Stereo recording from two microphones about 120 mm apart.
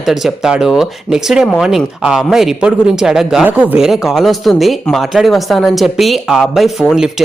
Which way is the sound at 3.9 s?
Centre (ahead or behind).